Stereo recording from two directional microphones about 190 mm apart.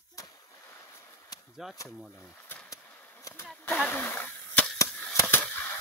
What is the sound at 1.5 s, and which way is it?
Speech, centre (ahead or behind).